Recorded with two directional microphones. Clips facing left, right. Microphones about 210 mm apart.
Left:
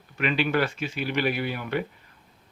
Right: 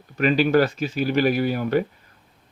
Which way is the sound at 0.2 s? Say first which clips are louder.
Right 7 dB; 40° right (ahead or behind).